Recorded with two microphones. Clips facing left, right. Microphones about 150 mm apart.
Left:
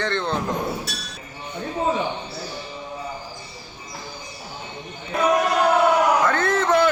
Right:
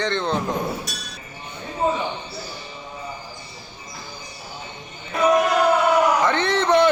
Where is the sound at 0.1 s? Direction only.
15° right (ahead or behind).